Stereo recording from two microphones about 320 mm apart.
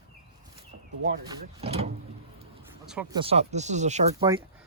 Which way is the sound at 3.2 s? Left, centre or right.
Centre.